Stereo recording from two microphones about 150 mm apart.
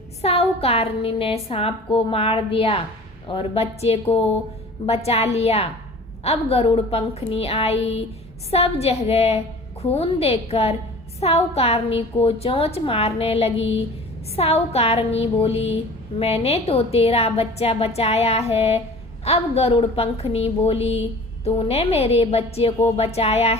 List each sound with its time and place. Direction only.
0.2 s a woman's voice: 40° left (ahead or behind)